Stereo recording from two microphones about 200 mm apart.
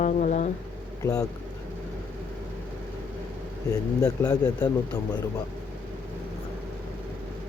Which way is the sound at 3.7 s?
15° left (ahead or behind).